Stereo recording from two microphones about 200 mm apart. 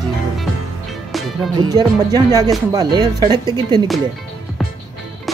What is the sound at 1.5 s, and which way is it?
Speech, 20° right (ahead or behind).